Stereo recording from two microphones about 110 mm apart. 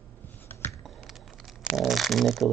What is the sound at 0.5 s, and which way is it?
Typing, 20° left (ahead or behind).